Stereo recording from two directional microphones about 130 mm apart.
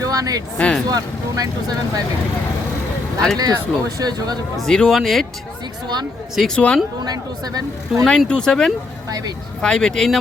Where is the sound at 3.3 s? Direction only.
30° right (ahead or behind).